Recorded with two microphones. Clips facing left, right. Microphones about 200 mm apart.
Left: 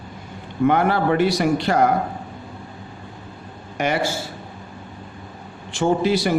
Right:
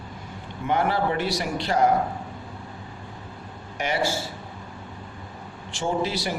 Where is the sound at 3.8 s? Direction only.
55° left (ahead or behind).